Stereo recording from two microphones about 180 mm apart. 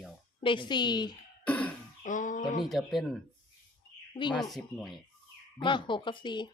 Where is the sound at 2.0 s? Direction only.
45° left (ahead or behind).